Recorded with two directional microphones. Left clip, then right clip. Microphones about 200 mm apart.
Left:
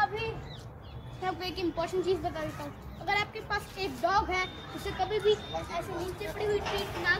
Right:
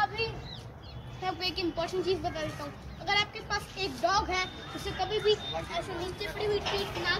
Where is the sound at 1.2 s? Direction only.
Centre (ahead or behind).